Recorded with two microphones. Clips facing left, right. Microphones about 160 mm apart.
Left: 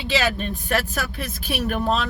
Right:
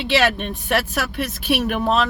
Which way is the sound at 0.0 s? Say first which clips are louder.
Right 4 dB; 70° right (ahead or behind).